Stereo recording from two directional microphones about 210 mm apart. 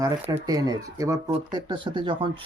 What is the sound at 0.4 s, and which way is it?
Speech, 20° right (ahead or behind).